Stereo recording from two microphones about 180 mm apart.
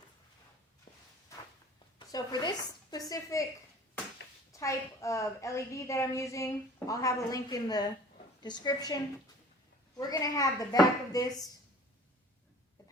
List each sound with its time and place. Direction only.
0.9 s walk: 30° left (ahead or behind)
2.0 s speech: 20° left (ahead or behind)
4.5 s a woman's voice: 15° left (ahead or behind)
10.0 s speech: 20° left (ahead or behind)